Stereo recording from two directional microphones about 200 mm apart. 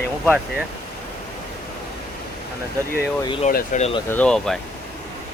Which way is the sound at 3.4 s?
40° left (ahead or behind).